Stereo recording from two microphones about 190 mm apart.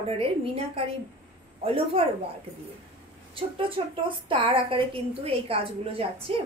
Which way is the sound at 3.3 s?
25° right (ahead or behind).